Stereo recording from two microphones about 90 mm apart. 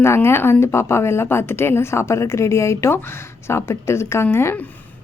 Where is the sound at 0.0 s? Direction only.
30° left (ahead or behind).